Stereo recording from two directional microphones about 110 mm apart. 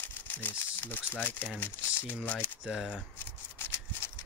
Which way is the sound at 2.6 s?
5° right (ahead or behind).